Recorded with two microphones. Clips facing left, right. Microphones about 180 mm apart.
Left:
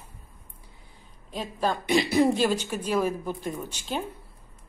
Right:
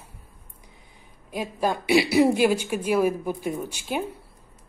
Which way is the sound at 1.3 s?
10° right (ahead or behind).